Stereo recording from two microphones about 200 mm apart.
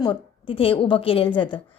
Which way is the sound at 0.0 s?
25° left (ahead or behind).